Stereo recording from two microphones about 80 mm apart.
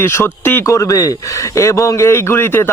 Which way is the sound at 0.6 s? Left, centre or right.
Left.